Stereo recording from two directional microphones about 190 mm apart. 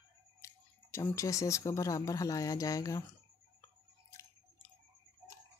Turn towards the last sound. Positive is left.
turn(degrees=15)  # may be behind; listen again after turning